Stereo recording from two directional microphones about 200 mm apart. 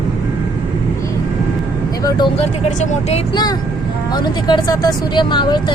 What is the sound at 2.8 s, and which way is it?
Speech, 30° left (ahead or behind).